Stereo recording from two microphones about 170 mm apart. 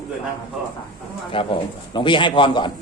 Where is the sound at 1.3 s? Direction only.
30° left (ahead or behind).